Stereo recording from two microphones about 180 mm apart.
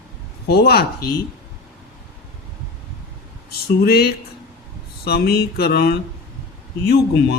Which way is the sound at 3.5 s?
60° left (ahead or behind).